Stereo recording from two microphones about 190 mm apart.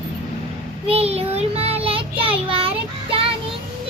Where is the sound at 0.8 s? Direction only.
30° right (ahead or behind).